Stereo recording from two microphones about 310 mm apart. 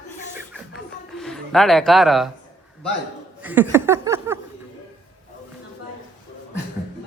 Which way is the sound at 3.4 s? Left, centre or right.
Centre.